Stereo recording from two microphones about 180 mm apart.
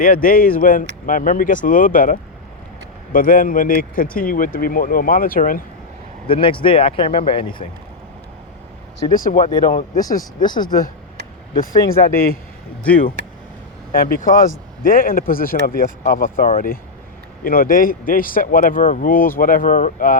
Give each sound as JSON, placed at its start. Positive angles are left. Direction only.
{"t": 0.0, "sound": "speech", "side_deg": 50}
{"t": 6.2, "sound": "speech", "side_deg": 30}
{"t": 9.3, "sound": "speech", "side_deg": 30}
{"t": 9.6, "sound": "speech", "side_deg": 45}
{"t": 10.0, "sound": "speech", "side_deg": 20}
{"t": 11.9, "sound": "a man's voice", "side_deg": 55}
{"t": 13.9, "sound": "speech", "side_deg": 50}